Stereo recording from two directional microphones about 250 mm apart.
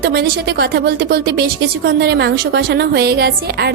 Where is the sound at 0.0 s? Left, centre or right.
Right.